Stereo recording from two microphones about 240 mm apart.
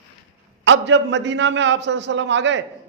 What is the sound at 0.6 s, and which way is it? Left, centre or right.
A man's voice, right.